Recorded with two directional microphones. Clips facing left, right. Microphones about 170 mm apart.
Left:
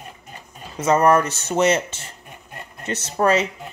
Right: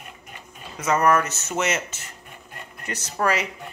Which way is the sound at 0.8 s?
30° left (ahead or behind).